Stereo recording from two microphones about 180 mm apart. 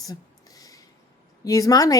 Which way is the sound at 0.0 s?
20° left (ahead or behind).